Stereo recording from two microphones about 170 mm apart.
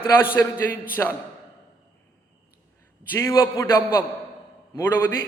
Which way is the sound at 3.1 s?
15° left (ahead or behind).